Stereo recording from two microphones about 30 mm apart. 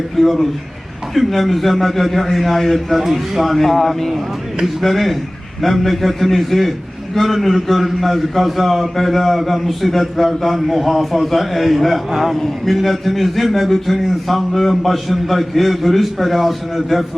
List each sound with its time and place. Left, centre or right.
0.2 s a man's voice: centre
3.0 s a man's voice: centre
3.4 s a man's voice: centre